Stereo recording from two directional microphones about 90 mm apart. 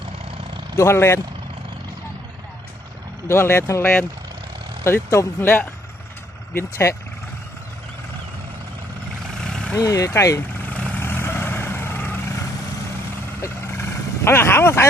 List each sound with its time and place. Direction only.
0.8 s speech: 30° left (ahead or behind)
3.2 s speech: 30° left (ahead or behind)
9.4 s vehicle: 5° left (ahead or behind)
9.7 s speech: 35° left (ahead or behind)
10.7 s vehicle: 15° left (ahead or behind)
11.0 s vehicle: 25° left (ahead or behind)
14.3 s speech: 25° left (ahead or behind)